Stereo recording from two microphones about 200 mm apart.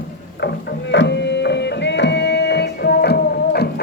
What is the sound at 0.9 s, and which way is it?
Music, 60° left (ahead or behind).